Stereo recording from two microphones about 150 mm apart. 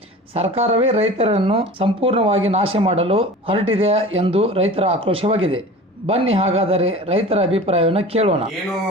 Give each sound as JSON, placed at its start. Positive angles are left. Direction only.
{"t": 0.3, "sound": "speech", "side_deg": -45}